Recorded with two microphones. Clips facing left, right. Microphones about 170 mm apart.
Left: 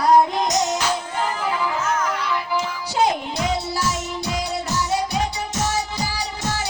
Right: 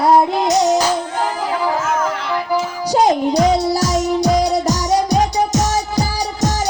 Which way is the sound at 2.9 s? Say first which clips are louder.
Right 8 dB; 40° right (ahead or behind).